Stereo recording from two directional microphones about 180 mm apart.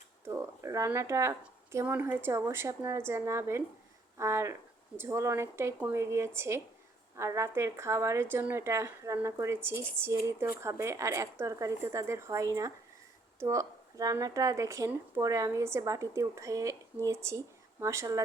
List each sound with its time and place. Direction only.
0.3 s speech: 15° right (ahead or behind)